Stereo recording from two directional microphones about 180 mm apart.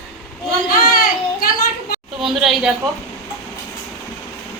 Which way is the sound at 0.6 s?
55° left (ahead or behind).